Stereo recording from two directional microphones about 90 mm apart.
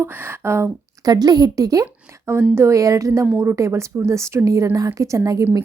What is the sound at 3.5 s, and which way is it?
A woman's voice, 35° right (ahead or behind).